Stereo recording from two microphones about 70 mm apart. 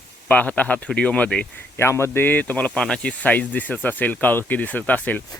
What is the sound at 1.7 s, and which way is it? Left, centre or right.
Speech, left.